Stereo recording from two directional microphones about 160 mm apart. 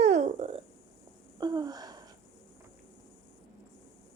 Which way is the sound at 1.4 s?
25° right (ahead or behind).